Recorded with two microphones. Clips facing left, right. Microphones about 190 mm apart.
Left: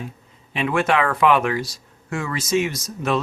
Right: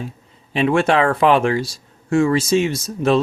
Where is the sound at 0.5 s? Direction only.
30° right (ahead or behind).